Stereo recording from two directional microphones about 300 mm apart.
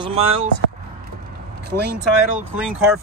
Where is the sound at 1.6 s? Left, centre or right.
Right.